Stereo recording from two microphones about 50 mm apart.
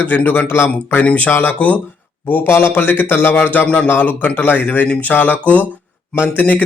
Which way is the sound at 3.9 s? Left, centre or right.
Left.